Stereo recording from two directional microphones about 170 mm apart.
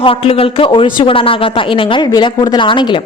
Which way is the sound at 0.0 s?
35° left (ahead or behind).